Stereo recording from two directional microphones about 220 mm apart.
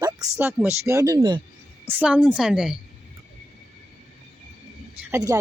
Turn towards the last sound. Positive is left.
turn(degrees=-15)  # may be behind; listen again after turning